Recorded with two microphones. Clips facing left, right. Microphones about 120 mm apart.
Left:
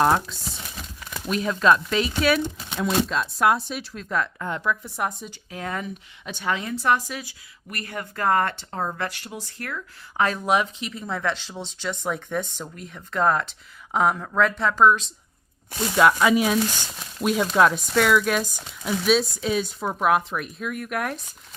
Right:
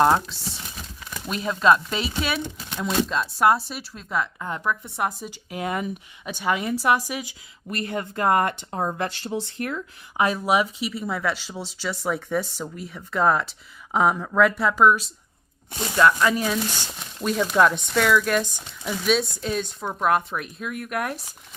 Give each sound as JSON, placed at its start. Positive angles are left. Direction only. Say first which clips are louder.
{"t": 0.0, "sound": "speech", "louder": "right 1 dB", "side_deg": 0}
{"t": 7.7, "sound": "speech", "louder": "right 5 dB", "side_deg": -25}
{"t": 10.2, "sound": "speech", "louder": "right 1 dB", "side_deg": -10}
{"t": 16.0, "sound": "speech", "louder": "left 1 dB", "side_deg": 10}